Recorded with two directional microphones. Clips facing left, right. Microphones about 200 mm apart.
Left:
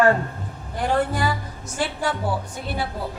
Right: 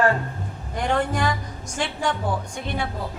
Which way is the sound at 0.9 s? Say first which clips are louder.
Left 1 dB; 5° left (ahead or behind).